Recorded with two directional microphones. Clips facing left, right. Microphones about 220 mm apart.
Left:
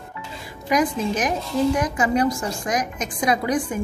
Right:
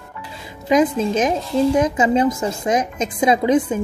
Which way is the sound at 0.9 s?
25° right (ahead or behind).